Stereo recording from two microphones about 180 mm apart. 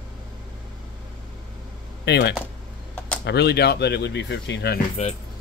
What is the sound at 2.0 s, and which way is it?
Speech, 70° left (ahead or behind).